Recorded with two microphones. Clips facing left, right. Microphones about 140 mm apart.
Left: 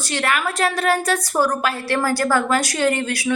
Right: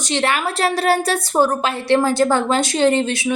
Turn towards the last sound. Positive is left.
turn(degrees=-25)  # may be behind; listen again after turning